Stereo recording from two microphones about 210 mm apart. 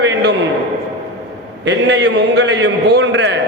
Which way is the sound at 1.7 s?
55° right (ahead or behind).